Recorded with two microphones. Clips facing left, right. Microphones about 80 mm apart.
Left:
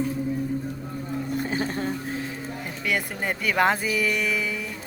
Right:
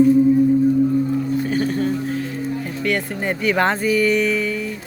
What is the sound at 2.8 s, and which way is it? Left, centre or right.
Speech, centre.